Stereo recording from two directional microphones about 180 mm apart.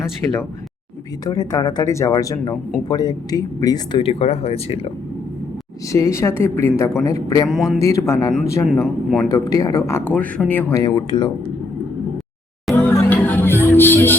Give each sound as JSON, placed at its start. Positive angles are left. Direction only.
{"t": 0.2, "sound": "a woman's voice", "side_deg": 15}
{"t": 5.9, "sound": "a woman's voice", "side_deg": 15}
{"t": 7.4, "sound": "speech", "side_deg": 0}
{"t": 7.8, "sound": "a woman's voice", "side_deg": 15}
{"t": 8.7, "sound": "speech", "side_deg": 0}
{"t": 9.3, "sound": "a woman's voice", "side_deg": 20}
{"t": 12.9, "sound": "music", "side_deg": 10}